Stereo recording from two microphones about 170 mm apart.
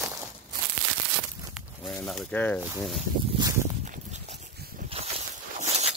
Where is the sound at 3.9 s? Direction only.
45° right (ahead or behind).